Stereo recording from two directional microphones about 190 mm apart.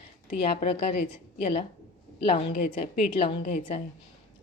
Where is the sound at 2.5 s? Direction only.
40° left (ahead or behind).